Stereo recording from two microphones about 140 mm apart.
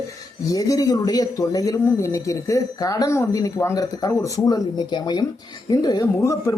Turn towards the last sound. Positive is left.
turn(degrees=25)  # may be behind; listen again after turning